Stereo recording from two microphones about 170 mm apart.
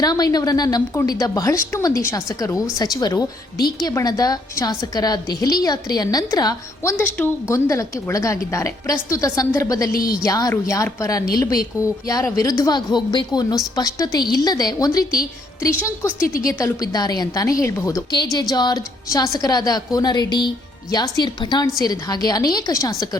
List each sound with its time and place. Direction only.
0.0 s a woman's voice: 20° left (ahead or behind)
7.2 s a woman's voice: 5° left (ahead or behind)
7.5 s a woman's voice: 20° left (ahead or behind)
16.5 s a woman's voice: 20° left (ahead or behind)